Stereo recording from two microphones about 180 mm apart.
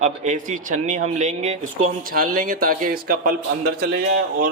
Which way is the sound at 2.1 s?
50° right (ahead or behind).